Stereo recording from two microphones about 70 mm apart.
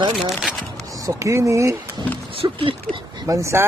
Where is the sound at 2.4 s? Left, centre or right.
Right.